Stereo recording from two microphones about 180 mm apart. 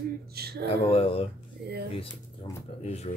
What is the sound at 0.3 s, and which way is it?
Speech, 60° right (ahead or behind).